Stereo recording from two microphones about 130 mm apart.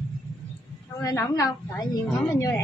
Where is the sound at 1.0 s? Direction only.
25° left (ahead or behind).